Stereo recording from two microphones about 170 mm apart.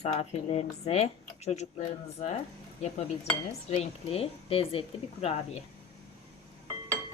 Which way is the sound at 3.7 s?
35° left (ahead or behind).